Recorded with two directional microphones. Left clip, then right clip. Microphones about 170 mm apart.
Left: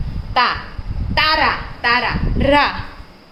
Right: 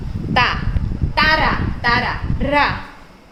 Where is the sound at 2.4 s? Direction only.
90° left.